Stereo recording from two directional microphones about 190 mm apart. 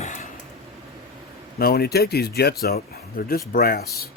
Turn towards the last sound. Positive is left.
turn(degrees=50)  # may be behind; listen again after turning